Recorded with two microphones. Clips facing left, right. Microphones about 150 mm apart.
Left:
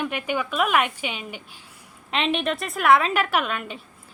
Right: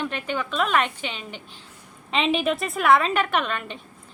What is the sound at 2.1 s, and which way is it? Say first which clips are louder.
A woman's voice: right 2 dB; centre (ahead or behind).